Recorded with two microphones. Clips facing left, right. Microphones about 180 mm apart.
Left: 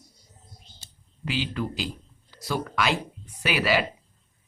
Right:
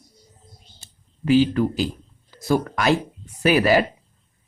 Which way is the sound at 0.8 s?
45° right (ahead or behind).